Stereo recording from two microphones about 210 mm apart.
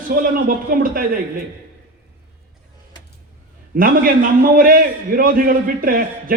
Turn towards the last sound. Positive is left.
turn(degrees=-45)  # may be behind; listen again after turning